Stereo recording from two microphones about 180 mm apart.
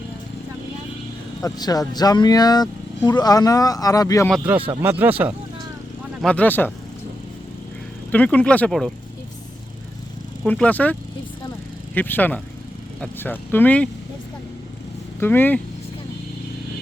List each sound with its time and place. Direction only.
1.5 s speech: 20° left (ahead or behind)
4.3 s speech: 10° right (ahead or behind)
6.2 s speech: 10° left (ahead or behind)
8.1 s speech: 5° left (ahead or behind)
10.4 s speech: 5° left (ahead or behind)
11.9 s speech: 10° left (ahead or behind)
15.2 s speech: 10° left (ahead or behind)